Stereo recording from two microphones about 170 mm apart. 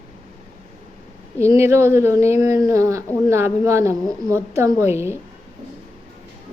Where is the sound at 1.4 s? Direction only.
15° right (ahead or behind).